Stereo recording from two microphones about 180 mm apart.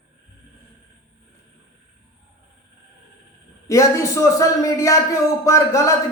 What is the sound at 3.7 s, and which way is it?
A man's voice, 15° left (ahead or behind).